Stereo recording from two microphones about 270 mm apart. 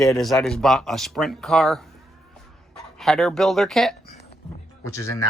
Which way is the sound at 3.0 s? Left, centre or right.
Centre.